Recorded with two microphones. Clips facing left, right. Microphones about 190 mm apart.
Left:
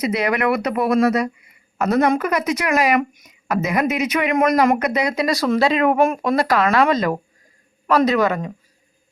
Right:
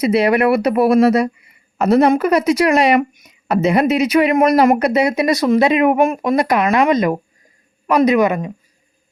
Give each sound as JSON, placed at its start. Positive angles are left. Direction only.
{"t": 0.0, "sound": "a woman's voice", "side_deg": -30}